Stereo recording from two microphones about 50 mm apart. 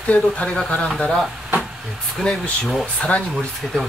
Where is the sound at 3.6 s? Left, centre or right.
Centre.